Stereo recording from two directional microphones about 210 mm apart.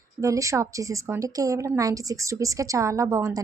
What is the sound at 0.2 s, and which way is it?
A woman's voice, 15° right (ahead or behind).